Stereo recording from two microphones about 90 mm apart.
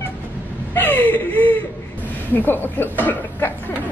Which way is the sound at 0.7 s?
20° left (ahead or behind).